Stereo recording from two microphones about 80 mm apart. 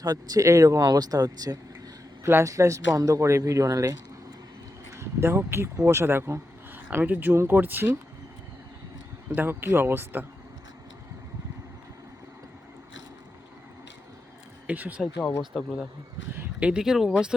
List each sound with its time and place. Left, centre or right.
0.0 s speech: right
2.2 s speech: right
4.9 s speech: right
9.3 s speech: right
14.7 s speech: centre
15.4 s speech: centre
16.3 s speech: centre